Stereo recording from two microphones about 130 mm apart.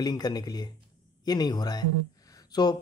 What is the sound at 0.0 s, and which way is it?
Speech, 30° left (ahead or behind).